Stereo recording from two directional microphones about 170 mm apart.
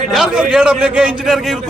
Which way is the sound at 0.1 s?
5° right (ahead or behind).